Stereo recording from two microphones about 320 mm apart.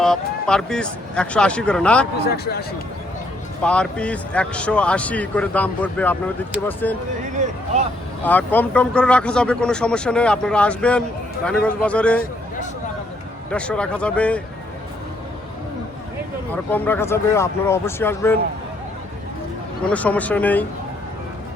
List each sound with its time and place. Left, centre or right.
0.0 s speech: centre
2.1 s a man's voice: left
3.6 s speech: centre
7.4 s a sound: right
8.2 s speech: centre
13.5 s speech: centre
16.6 s speech: centre
19.9 s speech: centre